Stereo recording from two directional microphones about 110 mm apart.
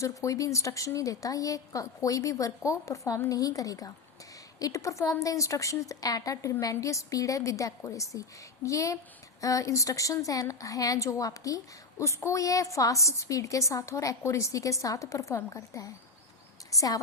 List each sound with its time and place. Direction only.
0.0 s a woman's voice: 30° left (ahead or behind)